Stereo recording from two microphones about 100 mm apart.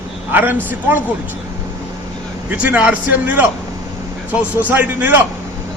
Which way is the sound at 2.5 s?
15° right (ahead or behind).